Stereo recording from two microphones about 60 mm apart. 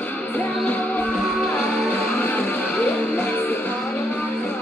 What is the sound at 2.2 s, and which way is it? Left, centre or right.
Music, left.